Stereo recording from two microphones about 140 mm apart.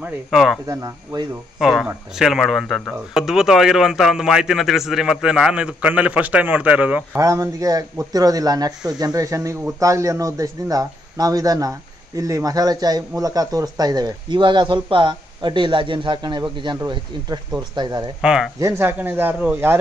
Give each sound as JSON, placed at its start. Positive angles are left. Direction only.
{"t": 0.0, "sound": "a man's voice", "side_deg": 0}
{"t": 0.7, "sound": "speech", "side_deg": -25}
{"t": 1.6, "sound": "a man's voice", "side_deg": 0}
{"t": 7.2, "sound": "a man's voice", "side_deg": -20}
{"t": 18.2, "sound": "a man's voice", "side_deg": -5}
{"t": 18.6, "sound": "speech", "side_deg": -15}